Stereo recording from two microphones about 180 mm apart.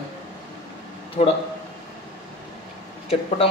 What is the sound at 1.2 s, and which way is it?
Speech, 45° left (ahead or behind).